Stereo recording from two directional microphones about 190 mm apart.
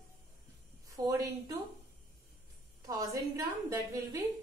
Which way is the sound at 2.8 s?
15° right (ahead or behind).